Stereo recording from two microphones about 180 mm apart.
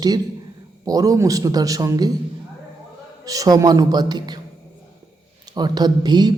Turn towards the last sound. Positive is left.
turn(degrees=-25)  # may be behind; listen again after turning